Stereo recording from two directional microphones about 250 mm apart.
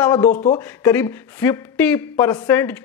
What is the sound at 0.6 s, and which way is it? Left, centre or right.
Speech, centre.